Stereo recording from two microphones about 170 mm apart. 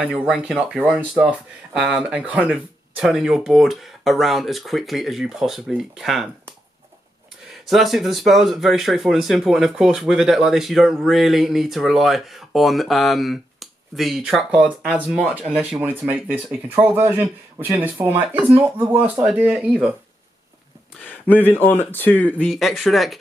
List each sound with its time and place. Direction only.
0.0 s speech: 5° right (ahead or behind)
7.6 s speech: centre (ahead or behind)
21.0 s speech: 10° left (ahead or behind)